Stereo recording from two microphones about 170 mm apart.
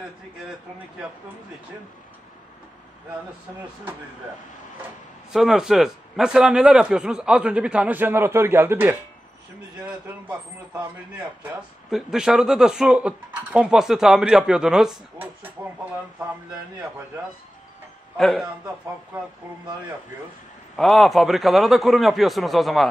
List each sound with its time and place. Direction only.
5.3 s speech: centre (ahead or behind)
11.9 s speech: 5° right (ahead or behind)
18.1 s a man's voice: centre (ahead or behind)
20.7 s speech: centre (ahead or behind)